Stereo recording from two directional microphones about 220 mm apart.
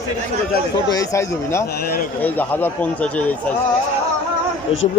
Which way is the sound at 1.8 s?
40° left (ahead or behind).